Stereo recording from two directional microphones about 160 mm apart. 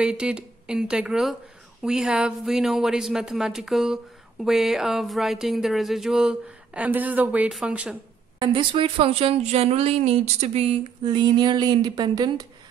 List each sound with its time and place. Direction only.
0.0 s speech: 5° right (ahead or behind)
8.4 s a woman's voice: 30° right (ahead or behind)